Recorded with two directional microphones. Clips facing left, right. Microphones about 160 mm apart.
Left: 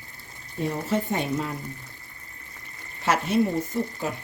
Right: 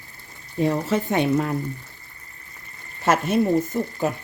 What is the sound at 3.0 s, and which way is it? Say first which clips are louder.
Speech: right 3 dB; 50° right (ahead or behind).